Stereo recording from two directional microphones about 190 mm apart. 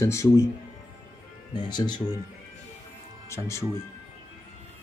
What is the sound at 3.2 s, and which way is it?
Speech, 15° left (ahead or behind).